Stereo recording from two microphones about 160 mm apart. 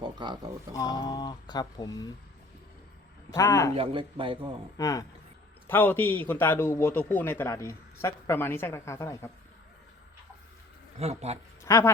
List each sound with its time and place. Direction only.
0.0 s speech: 25° right (ahead or behind)
0.7 s speech: 25° left (ahead or behind)
3.2 s speech: 20° left (ahead or behind)
3.8 s speech: 30° right (ahead or behind)
4.8 s a woman's voice: 20° left (ahead or behind)
11.0 s speech: 40° right (ahead or behind)
11.6 s speech: 20° left (ahead or behind)